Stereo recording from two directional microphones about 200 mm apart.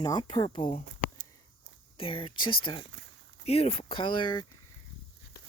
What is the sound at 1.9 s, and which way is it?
Speech, 25° left (ahead or behind).